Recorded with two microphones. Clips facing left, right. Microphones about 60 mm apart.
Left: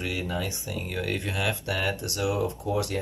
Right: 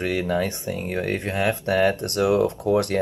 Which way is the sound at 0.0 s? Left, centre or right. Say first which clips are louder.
Right 8 dB; right.